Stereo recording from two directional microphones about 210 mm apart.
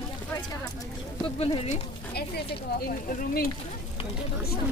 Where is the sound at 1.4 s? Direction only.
25° left (ahead or behind).